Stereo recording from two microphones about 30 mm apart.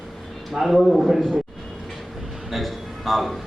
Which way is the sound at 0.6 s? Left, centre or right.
Centre.